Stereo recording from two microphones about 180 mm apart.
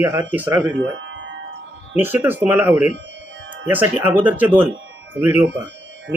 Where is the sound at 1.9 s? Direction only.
10° right (ahead or behind).